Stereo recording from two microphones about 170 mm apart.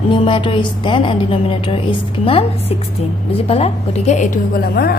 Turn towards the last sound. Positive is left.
turn(degrees=65)  # may be behind; listen again after turning